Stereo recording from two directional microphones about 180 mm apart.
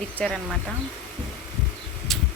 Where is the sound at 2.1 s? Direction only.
Centre (ahead or behind).